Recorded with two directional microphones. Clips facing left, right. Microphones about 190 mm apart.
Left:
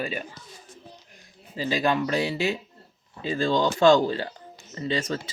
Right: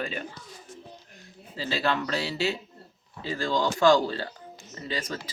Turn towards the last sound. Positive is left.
turn(degrees=25)  # may be behind; listen again after turning